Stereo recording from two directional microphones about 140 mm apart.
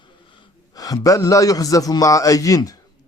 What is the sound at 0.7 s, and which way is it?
A man's voice, 25° left (ahead or behind).